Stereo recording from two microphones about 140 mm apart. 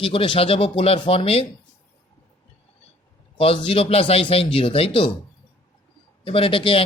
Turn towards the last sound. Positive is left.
turn(degrees=40)  # may be behind; listen again after turning